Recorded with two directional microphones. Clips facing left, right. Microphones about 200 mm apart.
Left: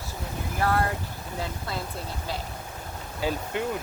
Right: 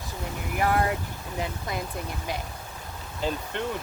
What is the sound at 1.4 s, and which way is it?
Speech, 15° right (ahead or behind).